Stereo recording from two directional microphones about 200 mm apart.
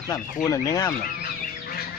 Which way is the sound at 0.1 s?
15° left (ahead or behind).